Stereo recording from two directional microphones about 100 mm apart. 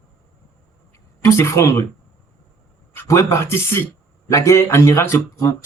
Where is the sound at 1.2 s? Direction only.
25° left (ahead or behind).